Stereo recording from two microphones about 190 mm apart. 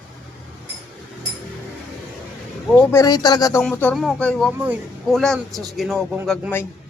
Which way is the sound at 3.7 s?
5° left (ahead or behind).